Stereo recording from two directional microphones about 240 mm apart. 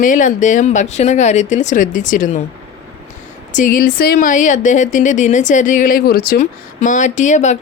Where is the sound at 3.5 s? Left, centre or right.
Left.